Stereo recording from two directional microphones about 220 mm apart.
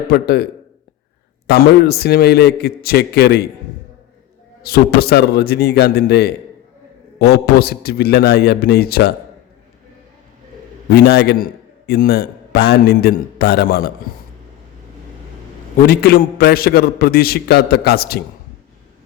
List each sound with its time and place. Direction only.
0.1 s a man's voice: 45° left (ahead or behind)
1.5 s a man's voice: 45° left (ahead or behind)
4.6 s a man's voice: 45° left (ahead or behind)
10.8 s a man's voice: 45° left (ahead or behind)
15.9 s a man's voice: 45° left (ahead or behind)